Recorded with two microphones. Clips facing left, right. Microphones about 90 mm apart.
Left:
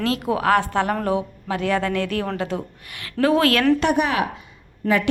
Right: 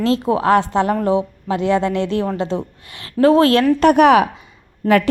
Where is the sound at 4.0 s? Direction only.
90° right.